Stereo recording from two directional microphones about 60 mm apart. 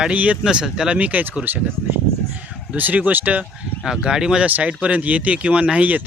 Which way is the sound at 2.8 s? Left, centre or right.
Right.